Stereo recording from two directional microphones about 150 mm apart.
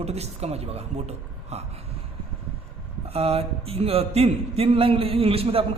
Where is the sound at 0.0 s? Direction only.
45° right (ahead or behind).